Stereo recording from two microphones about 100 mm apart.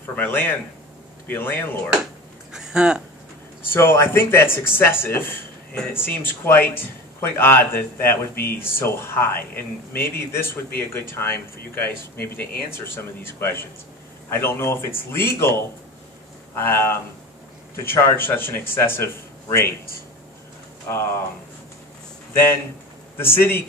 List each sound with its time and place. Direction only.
0.0 s a man's voice: 20° left (ahead or behind)
2.5 s a sound: 10° right (ahead or behind)
3.6 s a man's voice: 25° left (ahead or behind)
16.5 s a man's voice: 25° left (ahead or behind)
20.9 s a man's voice: 25° left (ahead or behind)
23.1 s a man's voice: 25° left (ahead or behind)